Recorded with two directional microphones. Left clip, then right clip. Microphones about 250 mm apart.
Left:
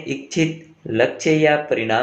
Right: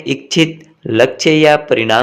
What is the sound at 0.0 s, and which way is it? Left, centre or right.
Speech, right.